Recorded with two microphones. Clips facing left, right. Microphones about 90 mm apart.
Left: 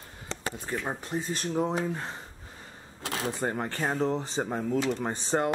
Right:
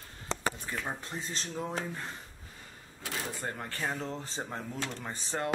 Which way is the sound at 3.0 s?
85° left.